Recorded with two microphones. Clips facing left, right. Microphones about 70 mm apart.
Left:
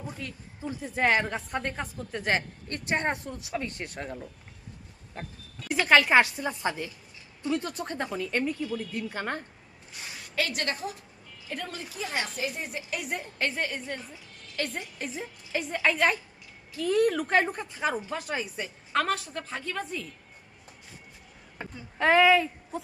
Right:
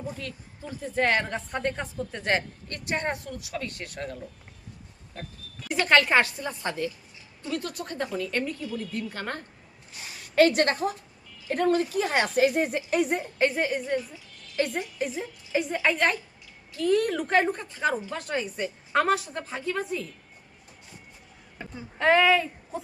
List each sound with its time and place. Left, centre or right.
0.2 s a woman's voice: centre
2.6 s speech: left
5.6 s a woman's voice: centre
6.3 s a woman's voice: centre
8.1 s a woman's voice: centre
10.3 s a woman's voice: right
13.1 s a woman's voice: centre
14.9 s a woman's voice: centre
18.9 s a woman's voice: centre
21.9 s speech: centre